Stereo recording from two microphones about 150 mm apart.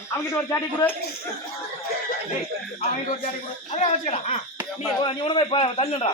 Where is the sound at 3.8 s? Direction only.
45° left (ahead or behind).